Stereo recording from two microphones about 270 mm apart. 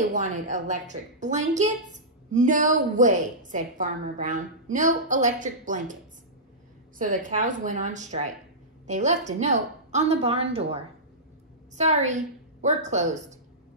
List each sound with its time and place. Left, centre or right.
0.0 s a woman's voice: right
7.0 s a woman's voice: right